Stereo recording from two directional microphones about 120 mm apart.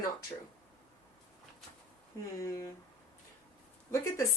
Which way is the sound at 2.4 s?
25° left (ahead or behind).